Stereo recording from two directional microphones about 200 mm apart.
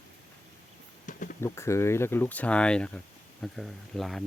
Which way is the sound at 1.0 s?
40° left (ahead or behind).